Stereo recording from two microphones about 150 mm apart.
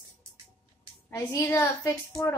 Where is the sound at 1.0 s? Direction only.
15° left (ahead or behind).